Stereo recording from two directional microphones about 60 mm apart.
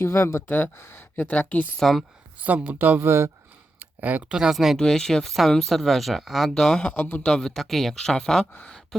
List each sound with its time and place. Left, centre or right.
0.0 s speech: left
0.4 s a woman's voice: left
1.8 s speech: centre
2.4 s speech: right
3.1 s speech: right
3.8 s a sound: right
4.3 s speech: centre
4.8 s speech: centre
6.9 s a woman's voice: left
7.2 s speech: centre